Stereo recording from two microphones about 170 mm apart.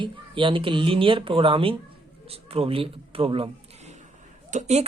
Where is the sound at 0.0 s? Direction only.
30° right (ahead or behind).